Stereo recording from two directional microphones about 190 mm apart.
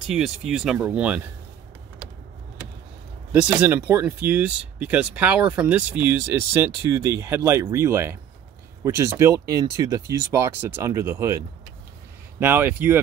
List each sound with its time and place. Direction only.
0.1 s speech: centre (ahead or behind)
3.5 s speech: 10° right (ahead or behind)